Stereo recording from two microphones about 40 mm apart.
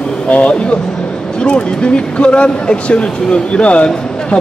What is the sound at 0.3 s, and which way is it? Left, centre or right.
Speech, left.